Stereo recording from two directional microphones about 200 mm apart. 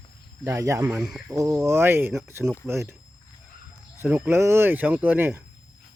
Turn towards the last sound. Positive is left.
turn(degrees=-10)  # may be behind; listen again after turning